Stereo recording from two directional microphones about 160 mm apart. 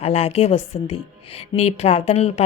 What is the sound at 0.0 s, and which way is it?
Speech, 40° left (ahead or behind).